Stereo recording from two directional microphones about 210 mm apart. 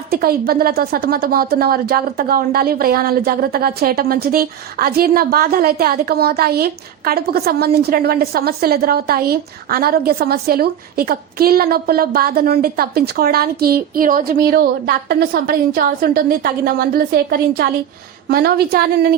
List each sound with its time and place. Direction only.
0.1 s a woman's voice: 45° right (ahead or behind)